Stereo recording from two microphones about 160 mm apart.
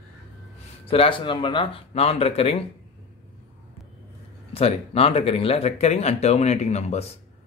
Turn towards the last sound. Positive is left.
turn(degrees=45)  # may be behind; listen again after turning